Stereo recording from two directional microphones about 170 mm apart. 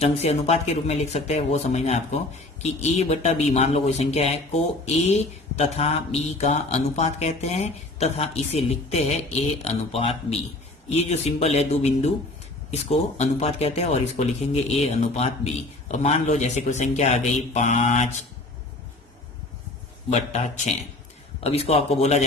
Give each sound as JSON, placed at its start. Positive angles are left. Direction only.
{"t": 0.0, "sound": "speech", "side_deg": 40}
{"t": 20.1, "sound": "speech", "side_deg": 40}